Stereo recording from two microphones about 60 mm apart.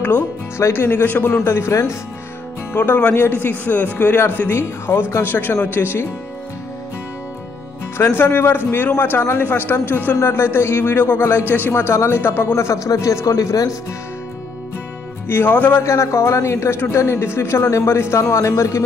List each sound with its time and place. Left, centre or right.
0.6 s speech: left
0.8 s speech: left
2.7 s speech: left
5.3 s speech: left
8.1 s speech: left
10.1 s speech: left
15.2 s speech: left
15.8 s a man's voice: left